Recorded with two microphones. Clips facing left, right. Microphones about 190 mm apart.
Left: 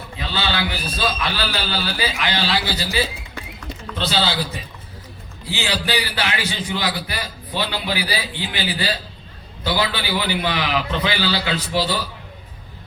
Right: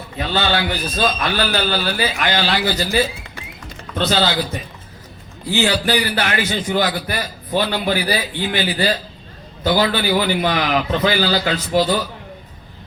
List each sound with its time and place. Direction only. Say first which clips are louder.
0.2 s a man's voice: right 5 dB; 50° right (ahead or behind)
3.9 s a sound: right 6 dB; 10° right (ahead or behind)
5.5 s a man's voice: right 6 dB; 50° right (ahead or behind)